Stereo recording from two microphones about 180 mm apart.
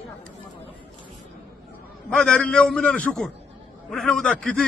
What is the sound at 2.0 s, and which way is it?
A man's voice, 5° left (ahead or behind).